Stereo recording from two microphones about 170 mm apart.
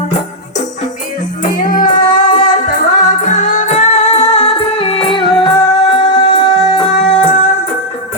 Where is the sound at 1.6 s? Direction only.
50° left (ahead or behind); by 6.8 s 30° left (ahead or behind).